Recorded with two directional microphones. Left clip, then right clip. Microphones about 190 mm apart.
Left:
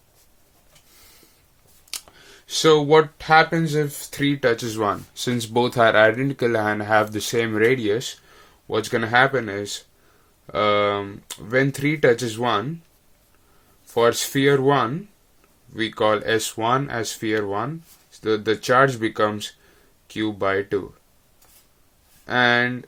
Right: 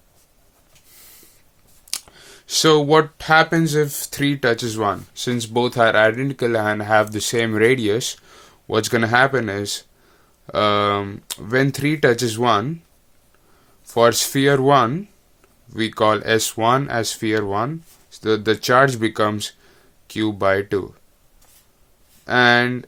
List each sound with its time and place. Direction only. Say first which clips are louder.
1.9 s speech: right 4 dB; 25° right (ahead or behind)
5.1 s speech: right 1 dB; 5° right (ahead or behind); by 12.6 s 35° right (ahead or behind)
13.8 s speech: right 3 dB; 35° right (ahead or behind)
22.3 s speech: right 4 dB; 30° right (ahead or behind)